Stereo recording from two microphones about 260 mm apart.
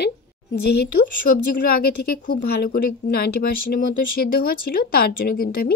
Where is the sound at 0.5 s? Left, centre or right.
Left.